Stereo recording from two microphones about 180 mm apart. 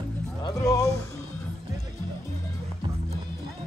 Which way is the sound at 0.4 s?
20° left (ahead or behind).